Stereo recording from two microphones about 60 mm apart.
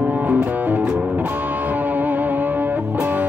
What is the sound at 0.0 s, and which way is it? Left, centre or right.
Music, right.